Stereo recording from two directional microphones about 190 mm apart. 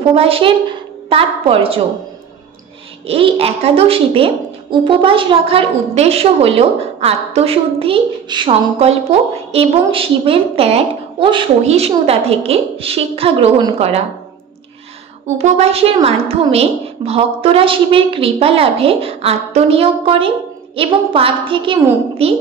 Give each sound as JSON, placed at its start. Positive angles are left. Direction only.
{"t": 0.1, "sound": "a woman's voice", "side_deg": -30}
{"t": 3.1, "sound": "a woman's voice", "side_deg": -30}
{"t": 15.3, "sound": "a woman's voice", "side_deg": -35}